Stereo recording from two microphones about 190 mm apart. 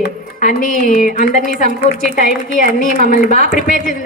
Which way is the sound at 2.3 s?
45° right (ahead or behind).